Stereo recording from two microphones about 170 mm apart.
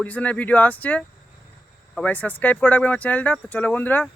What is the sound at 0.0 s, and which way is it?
Speech, 10° left (ahead or behind).